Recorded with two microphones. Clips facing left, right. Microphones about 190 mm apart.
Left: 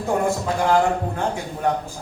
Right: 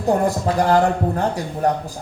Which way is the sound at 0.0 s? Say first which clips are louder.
Right 3 dB; 35° right (ahead or behind).